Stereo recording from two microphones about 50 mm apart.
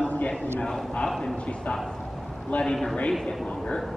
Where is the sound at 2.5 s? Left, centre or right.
Left.